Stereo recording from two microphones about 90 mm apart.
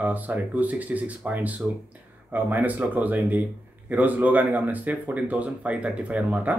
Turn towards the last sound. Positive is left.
turn(degrees=-20)  # may be behind; listen again after turning